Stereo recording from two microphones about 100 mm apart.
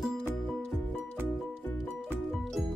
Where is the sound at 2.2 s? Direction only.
5° left (ahead or behind).